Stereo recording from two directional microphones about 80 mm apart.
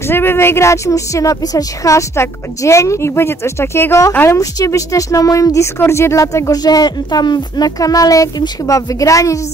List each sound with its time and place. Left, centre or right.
0.1 s a woman's voice: left
4.3 s speech: left